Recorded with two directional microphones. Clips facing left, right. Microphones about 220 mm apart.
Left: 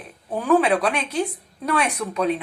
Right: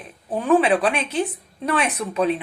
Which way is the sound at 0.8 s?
25° right (ahead or behind).